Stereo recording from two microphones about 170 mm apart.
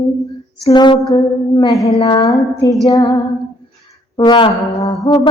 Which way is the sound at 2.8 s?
25° left (ahead or behind).